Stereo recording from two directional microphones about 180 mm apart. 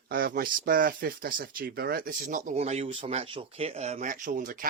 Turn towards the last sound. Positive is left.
turn(degrees=-50)  # may be behind; listen again after turning